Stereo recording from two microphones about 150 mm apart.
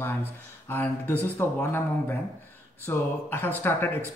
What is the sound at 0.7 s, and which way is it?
Speech, 15° left (ahead or behind).